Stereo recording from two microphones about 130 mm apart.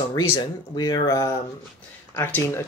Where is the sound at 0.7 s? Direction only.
35° left (ahead or behind).